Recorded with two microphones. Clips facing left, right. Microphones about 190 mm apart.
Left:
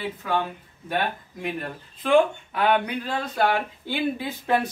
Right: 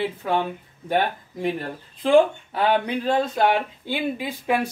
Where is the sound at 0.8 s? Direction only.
35° right (ahead or behind).